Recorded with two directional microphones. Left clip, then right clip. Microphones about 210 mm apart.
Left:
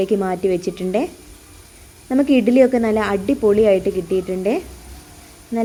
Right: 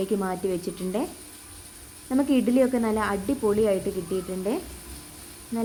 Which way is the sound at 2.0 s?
15° left (ahead or behind).